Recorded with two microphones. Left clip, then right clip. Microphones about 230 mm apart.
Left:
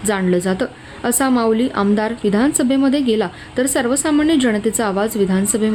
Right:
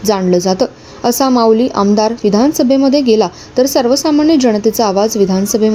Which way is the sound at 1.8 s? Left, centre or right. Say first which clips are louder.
Right 6 dB; centre.